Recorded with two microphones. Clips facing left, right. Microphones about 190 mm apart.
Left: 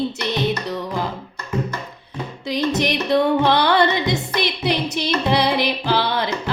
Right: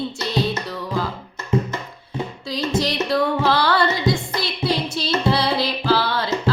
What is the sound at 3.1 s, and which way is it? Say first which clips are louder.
Female singing: left 3 dB; 20° left (ahead or behind).